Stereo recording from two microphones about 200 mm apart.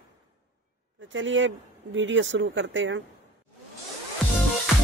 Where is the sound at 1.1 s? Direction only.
70° right (ahead or behind).